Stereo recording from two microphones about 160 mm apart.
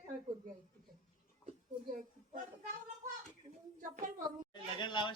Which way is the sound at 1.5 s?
55° right (ahead or behind).